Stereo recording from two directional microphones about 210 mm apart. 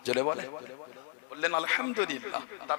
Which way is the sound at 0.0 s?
15° left (ahead or behind).